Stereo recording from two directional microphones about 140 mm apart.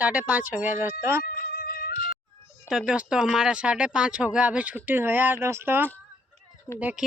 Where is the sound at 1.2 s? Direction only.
90° left.